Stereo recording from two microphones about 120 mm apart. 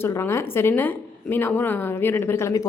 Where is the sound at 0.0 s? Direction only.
20° left (ahead or behind).